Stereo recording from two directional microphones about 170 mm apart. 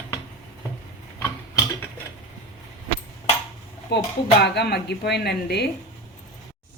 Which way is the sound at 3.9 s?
75° left (ahead or behind).